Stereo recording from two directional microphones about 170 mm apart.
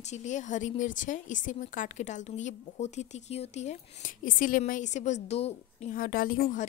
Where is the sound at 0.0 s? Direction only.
45° left (ahead or behind).